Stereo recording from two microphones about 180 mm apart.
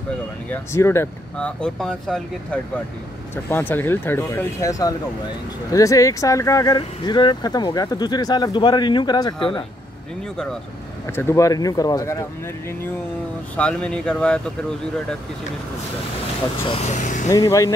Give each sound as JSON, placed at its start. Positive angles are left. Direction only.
{"t": 0.5, "sound": "speech", "side_deg": 15}
{"t": 10.3, "sound": "speech", "side_deg": 5}
{"t": 11.1, "sound": "speech", "side_deg": 15}
{"t": 13.6, "sound": "speech", "side_deg": 5}
{"t": 16.6, "sound": "speech", "side_deg": 35}
{"t": 17.3, "sound": "speech", "side_deg": 15}